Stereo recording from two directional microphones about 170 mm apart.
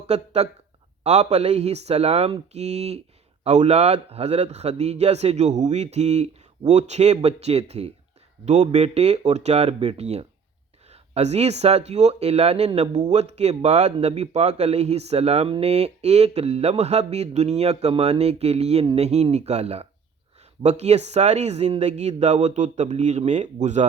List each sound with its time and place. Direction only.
0.1 s speech: 40° right (ahead or behind)